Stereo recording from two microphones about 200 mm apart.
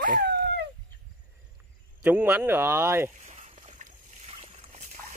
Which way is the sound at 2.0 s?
10° right (ahead or behind).